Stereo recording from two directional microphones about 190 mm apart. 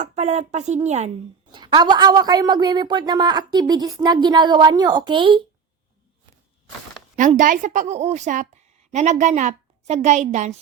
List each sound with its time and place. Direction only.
0.0 s speech: 40° right (ahead or behind)
1.5 s speech: 25° right (ahead or behind)
7.2 s a woman's voice: 40° right (ahead or behind)